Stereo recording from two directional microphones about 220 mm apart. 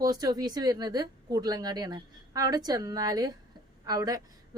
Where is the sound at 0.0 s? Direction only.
15° right (ahead or behind).